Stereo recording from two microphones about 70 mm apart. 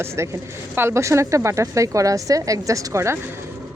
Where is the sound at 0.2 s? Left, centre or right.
Right.